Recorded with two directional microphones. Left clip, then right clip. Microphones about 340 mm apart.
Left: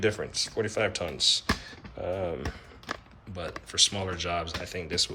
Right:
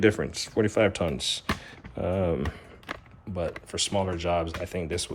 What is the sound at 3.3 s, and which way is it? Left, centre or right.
Speech, centre.